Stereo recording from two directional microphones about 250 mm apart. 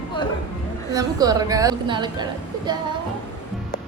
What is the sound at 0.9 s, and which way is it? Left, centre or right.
A woman's voice, centre.